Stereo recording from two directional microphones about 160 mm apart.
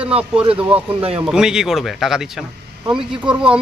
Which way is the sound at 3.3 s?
30° right (ahead or behind).